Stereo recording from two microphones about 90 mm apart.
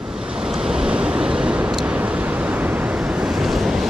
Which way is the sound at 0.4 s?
10° right (ahead or behind).